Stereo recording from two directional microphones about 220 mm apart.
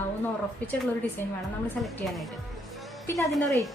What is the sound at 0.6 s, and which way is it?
Speech, 5° left (ahead or behind).